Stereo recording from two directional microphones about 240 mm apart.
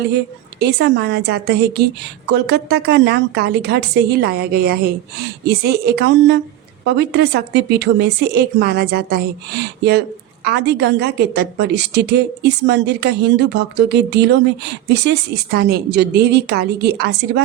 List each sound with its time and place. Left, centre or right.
0.6 s a woman's voice: right
10.4 s a woman's voice: right
15.5 s a woman's voice: right